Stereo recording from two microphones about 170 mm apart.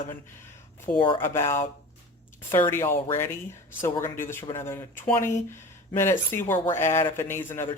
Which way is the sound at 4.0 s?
15° left (ahead or behind).